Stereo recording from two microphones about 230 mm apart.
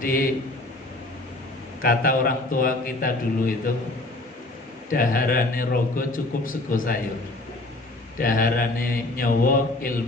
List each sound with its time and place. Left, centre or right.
0.0 s a man's voice: left
1.8 s a man's voice: left
4.9 s a man's voice: left
8.2 s a man's voice: left